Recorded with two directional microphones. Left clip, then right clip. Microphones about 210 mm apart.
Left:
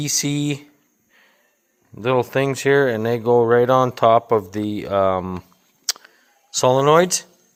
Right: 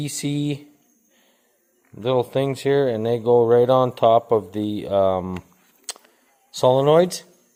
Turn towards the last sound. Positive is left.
turn(degrees=-5)  # may be behind; listen again after turning